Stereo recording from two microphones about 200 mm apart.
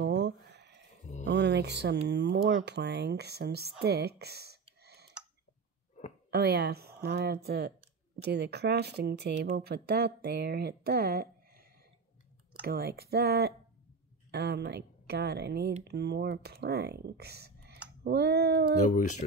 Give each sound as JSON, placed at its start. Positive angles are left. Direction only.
{"t": 0.0, "sound": "a sound", "side_deg": -65}
{"t": 1.2, "sound": "music", "side_deg": -60}
{"t": 2.0, "sound": "speech", "side_deg": -60}
{"t": 4.8, "sound": "tick", "side_deg": -55}
{"t": 6.3, "sound": "speech", "side_deg": -55}
{"t": 12.6, "sound": "speech", "side_deg": -50}
{"t": 18.9, "sound": "speech", "side_deg": 40}